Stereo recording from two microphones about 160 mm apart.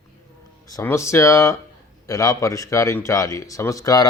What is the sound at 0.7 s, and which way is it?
Speech, 20° left (ahead or behind).